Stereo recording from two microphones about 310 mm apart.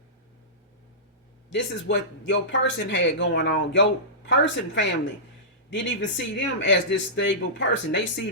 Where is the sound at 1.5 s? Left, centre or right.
Left.